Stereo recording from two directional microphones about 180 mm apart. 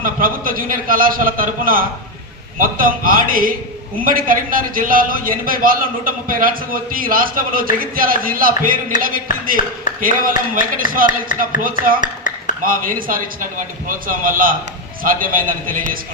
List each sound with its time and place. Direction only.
0.0 s a man's voice: 50° right (ahead or behind)
11.3 s speech: 45° left (ahead or behind)
11.9 s a sound: 45° left (ahead or behind)
12.6 s a man's voice: 50° right (ahead or behind)